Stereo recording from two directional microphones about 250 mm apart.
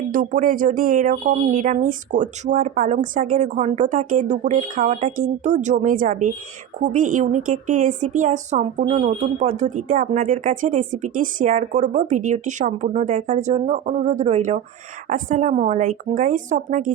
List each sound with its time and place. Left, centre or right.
0.1 s a woman's voice: right